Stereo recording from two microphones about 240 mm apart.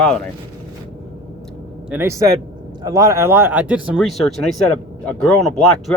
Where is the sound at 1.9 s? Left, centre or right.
Centre.